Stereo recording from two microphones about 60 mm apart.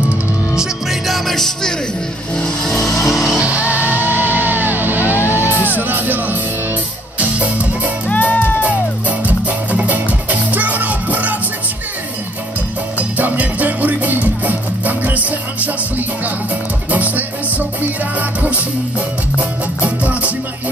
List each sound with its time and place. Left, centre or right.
0.6 s music: centre
2.3 s vehicle: centre
3.3 s music: right
8.1 s music: left
9.2 s music: right
13.2 s music: right
16.9 s music: right
19.8 s music: right